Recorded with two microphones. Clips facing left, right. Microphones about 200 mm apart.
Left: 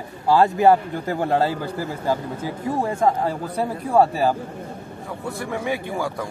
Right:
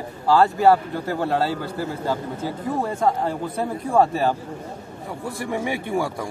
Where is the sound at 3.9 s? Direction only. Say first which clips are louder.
Left 1 dB; 10° left (ahead or behind).